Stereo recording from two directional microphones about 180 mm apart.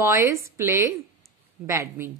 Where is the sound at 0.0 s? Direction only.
15° right (ahead or behind).